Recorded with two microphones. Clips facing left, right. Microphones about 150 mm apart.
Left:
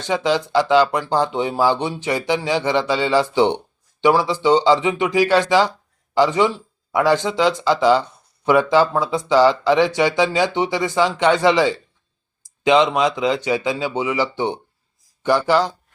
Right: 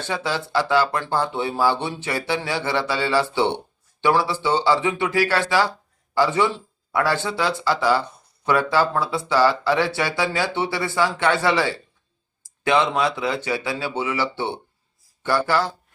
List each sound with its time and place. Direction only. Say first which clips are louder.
0.0 s speech: left 6 dB; 15° left (ahead or behind)